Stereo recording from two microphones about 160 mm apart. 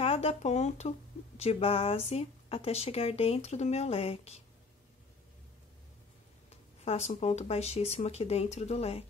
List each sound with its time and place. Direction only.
0.0 s speech: 40° left (ahead or behind)
6.8 s speech: 40° left (ahead or behind)